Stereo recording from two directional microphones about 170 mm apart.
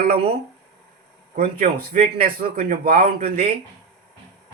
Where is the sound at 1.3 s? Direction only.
60° right (ahead or behind).